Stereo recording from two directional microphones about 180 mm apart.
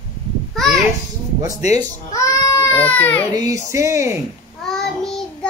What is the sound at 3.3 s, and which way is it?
Speech, 20° right (ahead or behind).